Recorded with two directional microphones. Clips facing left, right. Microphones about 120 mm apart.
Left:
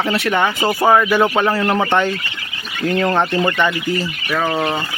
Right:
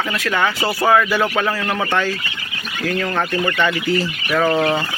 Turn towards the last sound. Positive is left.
turn(degrees=5)  # may be behind; listen again after turning